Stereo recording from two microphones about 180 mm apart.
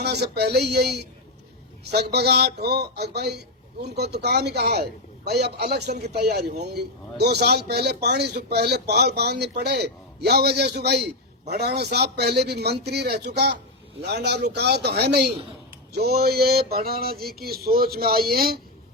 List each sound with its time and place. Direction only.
0.0 s a man's voice: 65° right (ahead or behind)